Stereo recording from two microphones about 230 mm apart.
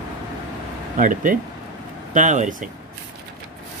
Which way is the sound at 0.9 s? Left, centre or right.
Right.